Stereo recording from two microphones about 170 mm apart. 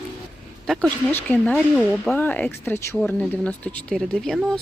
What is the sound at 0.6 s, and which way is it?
Speech, 5° left (ahead or behind).